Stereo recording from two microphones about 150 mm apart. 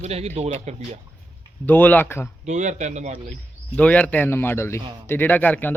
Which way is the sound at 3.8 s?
10° left (ahead or behind).